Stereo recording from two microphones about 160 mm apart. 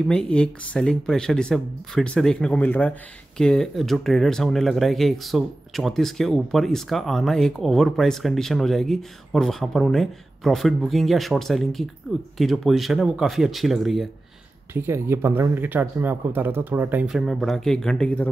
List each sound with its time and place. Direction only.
0.1 s speech: 5° left (ahead or behind)
14.7 s speech: 15° right (ahead or behind); by 18.3 s 5° left (ahead or behind)